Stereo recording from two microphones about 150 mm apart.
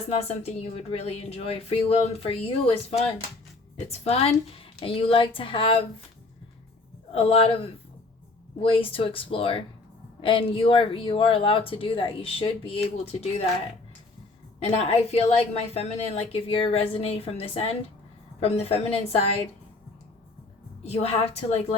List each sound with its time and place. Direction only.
0.1 s speech: 45° left (ahead or behind)
3.8 s a woman's voice: 40° left (ahead or behind)
7.1 s a woman's voice: 40° left (ahead or behind)
14.6 s a woman's voice: 40° left (ahead or behind)
20.8 s speech: 45° left (ahead or behind)